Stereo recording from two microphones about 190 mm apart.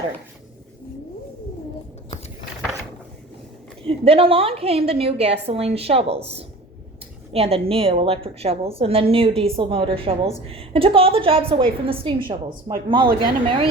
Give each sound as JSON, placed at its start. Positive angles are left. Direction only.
{"t": 3.8, "sound": "a woman's voice", "side_deg": -30}